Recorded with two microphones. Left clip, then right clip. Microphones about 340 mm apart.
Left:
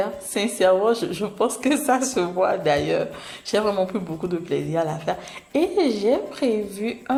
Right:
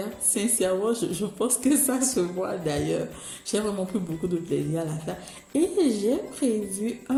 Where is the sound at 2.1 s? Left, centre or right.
Left.